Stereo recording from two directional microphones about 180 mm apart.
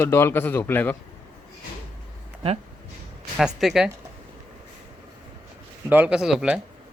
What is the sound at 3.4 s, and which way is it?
Speech, centre (ahead or behind).